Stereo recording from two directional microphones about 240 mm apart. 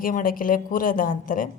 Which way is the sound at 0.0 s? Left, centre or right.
Left.